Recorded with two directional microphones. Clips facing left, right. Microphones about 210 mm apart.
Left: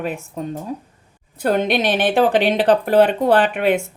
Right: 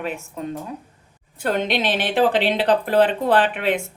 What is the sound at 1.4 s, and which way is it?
Speech, 45° left (ahead or behind).